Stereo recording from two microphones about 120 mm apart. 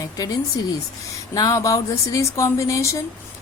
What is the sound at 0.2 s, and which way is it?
Speech, 30° left (ahead or behind).